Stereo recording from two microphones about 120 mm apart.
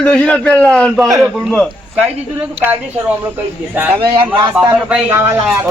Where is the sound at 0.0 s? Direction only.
5° left (ahead or behind).